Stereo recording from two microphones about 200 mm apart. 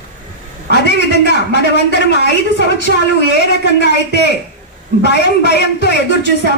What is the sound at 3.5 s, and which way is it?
A man's voice, 60° left (ahead or behind).